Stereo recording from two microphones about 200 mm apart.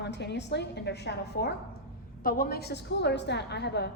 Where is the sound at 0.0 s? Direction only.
60° left (ahead or behind).